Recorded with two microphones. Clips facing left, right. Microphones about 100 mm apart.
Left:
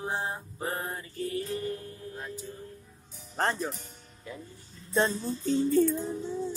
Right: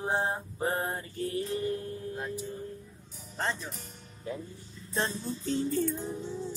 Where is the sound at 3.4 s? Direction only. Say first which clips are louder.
Left 5 dB; 50° left (ahead or behind).